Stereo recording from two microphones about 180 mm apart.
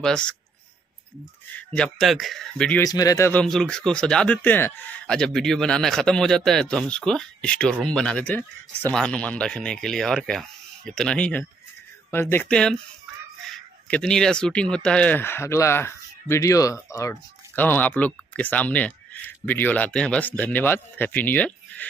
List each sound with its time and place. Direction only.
0.0 s speech: 5° left (ahead or behind)
1.7 s speech: 5° left (ahead or behind)
2.8 s speech: 20° left (ahead or behind)
3.4 s speech: 5° left (ahead or behind)